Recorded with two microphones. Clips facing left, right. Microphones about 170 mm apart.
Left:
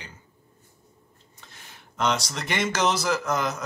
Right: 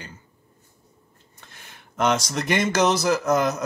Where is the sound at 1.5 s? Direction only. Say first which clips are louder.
Right 2 dB; 50° right (ahead or behind).